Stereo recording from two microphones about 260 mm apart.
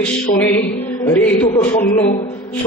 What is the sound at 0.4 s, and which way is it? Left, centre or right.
A man's voice, centre.